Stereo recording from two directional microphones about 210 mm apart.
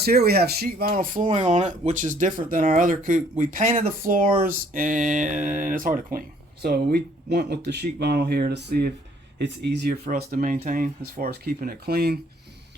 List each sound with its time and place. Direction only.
0.0 s speech: 50° right (ahead or behind)